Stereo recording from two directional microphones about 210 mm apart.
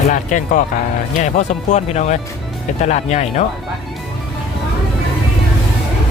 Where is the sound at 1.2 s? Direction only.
35° left (ahead or behind).